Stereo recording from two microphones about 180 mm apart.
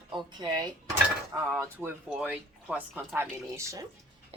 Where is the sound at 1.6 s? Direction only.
10° right (ahead or behind).